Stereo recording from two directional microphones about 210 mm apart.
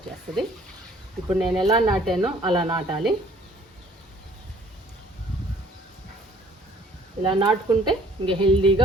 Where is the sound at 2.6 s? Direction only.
25° right (ahead or behind).